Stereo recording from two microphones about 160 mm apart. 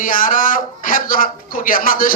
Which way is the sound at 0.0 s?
60° left (ahead or behind).